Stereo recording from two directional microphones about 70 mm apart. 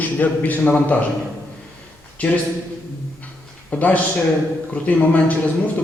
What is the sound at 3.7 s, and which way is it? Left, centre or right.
A man's voice, left.